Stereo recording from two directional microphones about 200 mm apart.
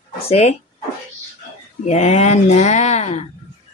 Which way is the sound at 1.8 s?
35° left (ahead or behind).